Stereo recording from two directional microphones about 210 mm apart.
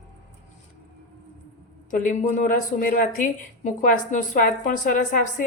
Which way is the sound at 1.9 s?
40° left (ahead or behind).